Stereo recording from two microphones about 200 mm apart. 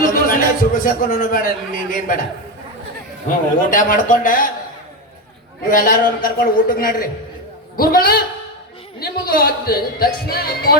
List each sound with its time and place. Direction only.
0.0 s a man's voice: 45° left (ahead or behind)
3.7 s speech: 40° left (ahead or behind)
5.7 s speech: 45° left (ahead or behind)